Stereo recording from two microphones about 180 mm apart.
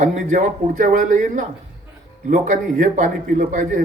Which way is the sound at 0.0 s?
45° right (ahead or behind).